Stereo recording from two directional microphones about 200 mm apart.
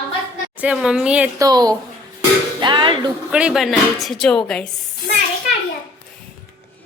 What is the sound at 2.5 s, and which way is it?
Music, 20° right (ahead or behind).